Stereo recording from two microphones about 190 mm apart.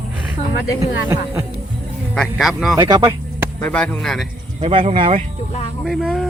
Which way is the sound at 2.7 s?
20° right (ahead or behind).